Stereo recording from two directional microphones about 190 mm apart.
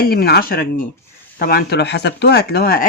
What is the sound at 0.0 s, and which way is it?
Speech, 55° left (ahead or behind).